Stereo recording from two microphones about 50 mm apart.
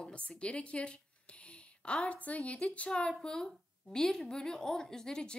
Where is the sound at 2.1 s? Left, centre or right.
Left.